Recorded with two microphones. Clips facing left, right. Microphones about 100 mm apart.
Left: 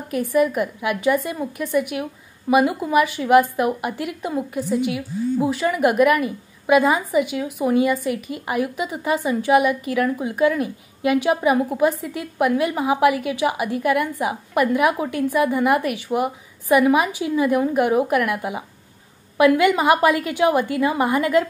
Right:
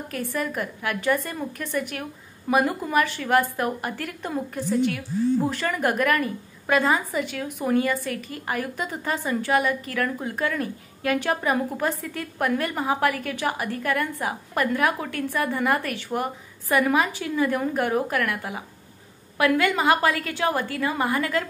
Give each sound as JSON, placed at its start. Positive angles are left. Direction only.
{"t": 0.1, "sound": "a woman's voice", "side_deg": 15}